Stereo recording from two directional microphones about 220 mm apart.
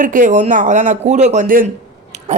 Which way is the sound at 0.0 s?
35° right (ahead or behind).